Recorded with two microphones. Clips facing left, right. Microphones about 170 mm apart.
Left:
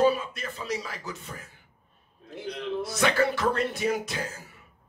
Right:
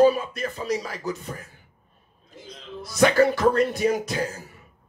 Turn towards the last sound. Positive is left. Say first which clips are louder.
# right 5 dB
turn(degrees=-40)  # may be behind; listen again after turning